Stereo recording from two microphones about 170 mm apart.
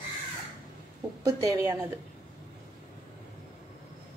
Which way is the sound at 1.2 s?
20° right (ahead or behind).